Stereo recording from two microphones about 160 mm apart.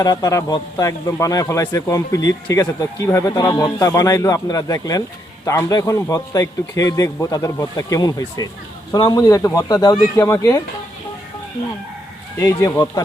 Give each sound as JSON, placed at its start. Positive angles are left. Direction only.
{"t": 0.0, "sound": "speech", "side_deg": 25}
{"t": 12.4, "sound": "speech", "side_deg": 20}